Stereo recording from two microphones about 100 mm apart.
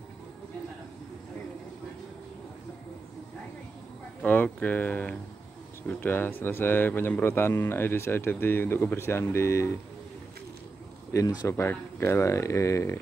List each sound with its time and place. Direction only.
4.2 s speech: 15° left (ahead or behind)
11.1 s speech: 30° left (ahead or behind)